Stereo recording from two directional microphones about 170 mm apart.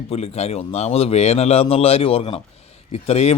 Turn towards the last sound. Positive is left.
turn(degrees=40)  # may be behind; listen again after turning